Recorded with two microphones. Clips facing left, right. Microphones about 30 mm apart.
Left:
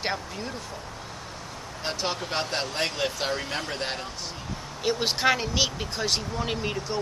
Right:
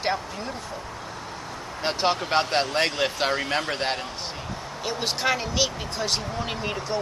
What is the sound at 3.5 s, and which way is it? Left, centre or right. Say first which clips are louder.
Speech: right 5 dB; right.